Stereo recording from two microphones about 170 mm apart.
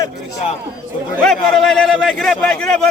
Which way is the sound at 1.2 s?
5° left (ahead or behind).